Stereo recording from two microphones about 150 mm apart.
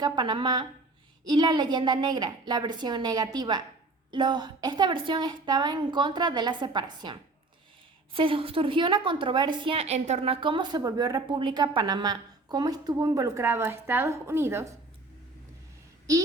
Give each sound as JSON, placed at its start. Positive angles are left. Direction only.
{"t": 0.0, "sound": "a woman's voice", "side_deg": -30}
{"t": 16.1, "sound": "a woman's voice", "side_deg": -25}